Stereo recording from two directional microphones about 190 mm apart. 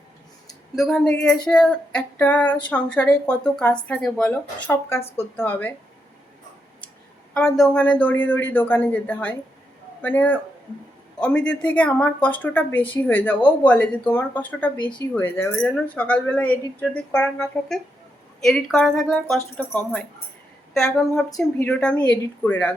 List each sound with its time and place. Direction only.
0.4 s speech: centre (ahead or behind)
7.3 s speech: 5° left (ahead or behind)
14.8 s speech: 25° left (ahead or behind)
15.1 s speech: 10° left (ahead or behind)